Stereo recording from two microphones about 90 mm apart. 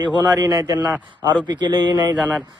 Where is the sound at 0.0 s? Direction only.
55° right (ahead or behind).